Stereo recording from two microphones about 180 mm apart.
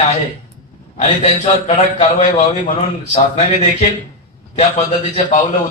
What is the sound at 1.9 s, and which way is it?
A man's voice, 40° left (ahead or behind).